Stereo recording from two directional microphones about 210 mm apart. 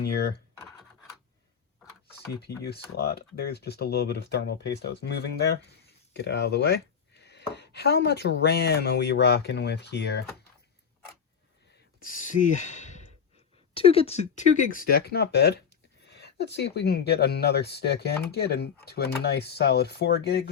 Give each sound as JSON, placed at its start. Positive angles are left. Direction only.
{"t": 0.0, "sound": "speech", "side_deg": 50}
{"t": 2.6, "sound": "speech", "side_deg": 50}
{"t": 12.0, "sound": "speech", "side_deg": 40}